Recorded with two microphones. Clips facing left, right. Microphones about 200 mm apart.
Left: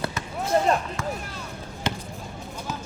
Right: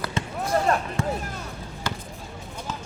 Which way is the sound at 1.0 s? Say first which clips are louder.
Right 4 dB; 30° right (ahead or behind).